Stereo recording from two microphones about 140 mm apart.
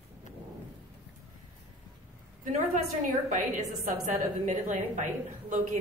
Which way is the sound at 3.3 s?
60° right (ahead or behind).